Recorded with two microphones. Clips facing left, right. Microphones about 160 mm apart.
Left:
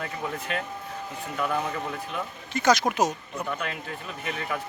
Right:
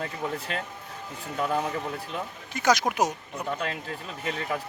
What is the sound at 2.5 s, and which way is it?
Speech, 10° right (ahead or behind).